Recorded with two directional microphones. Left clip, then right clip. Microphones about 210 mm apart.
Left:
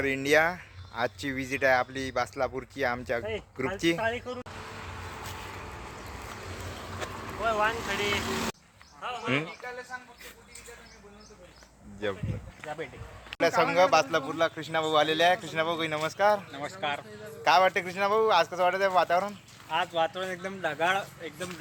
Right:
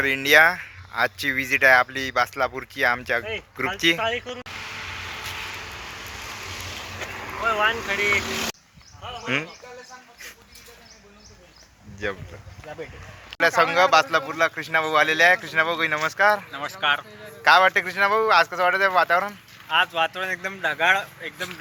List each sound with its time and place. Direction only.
0.0 s speech: 5° left (ahead or behind)
5.5 s a sound: 45° left (ahead or behind)
7.4 s speech: 35° right (ahead or behind)
8.2 s speech: 40° left (ahead or behind)
9.0 s a sound: 5° right (ahead or behind)
9.2 s speech: 5° left (ahead or behind)
12.0 s speech: centre (ahead or behind)
12.6 s speech: 30° right (ahead or behind)
13.4 s speech: centre (ahead or behind)
16.5 s speech: 10° left (ahead or behind)
17.4 s speech: centre (ahead or behind)
19.6 s speech: 10° left (ahead or behind)